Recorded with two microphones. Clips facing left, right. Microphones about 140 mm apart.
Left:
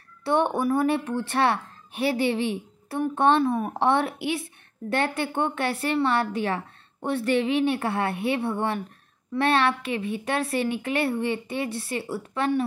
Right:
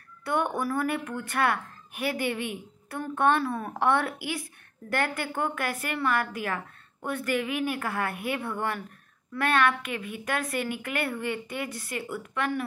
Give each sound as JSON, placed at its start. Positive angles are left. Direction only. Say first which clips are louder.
{"t": 0.2, "sound": "a woman's voice", "louder": "left 5 dB", "side_deg": 30}